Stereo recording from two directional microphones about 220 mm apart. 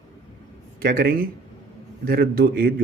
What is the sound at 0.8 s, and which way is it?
Speech, 40° right (ahead or behind).